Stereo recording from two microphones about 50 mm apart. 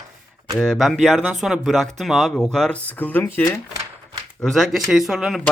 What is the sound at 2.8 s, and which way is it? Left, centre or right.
Speech, left.